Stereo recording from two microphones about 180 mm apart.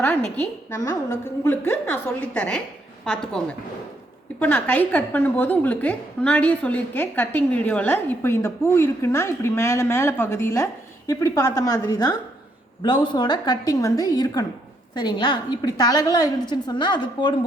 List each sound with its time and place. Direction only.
0.0 s a woman's voice: 10° left (ahead or behind); by 17.4 s 25° left (ahead or behind)